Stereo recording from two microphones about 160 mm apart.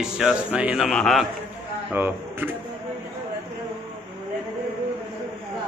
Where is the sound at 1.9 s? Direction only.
10° right (ahead or behind).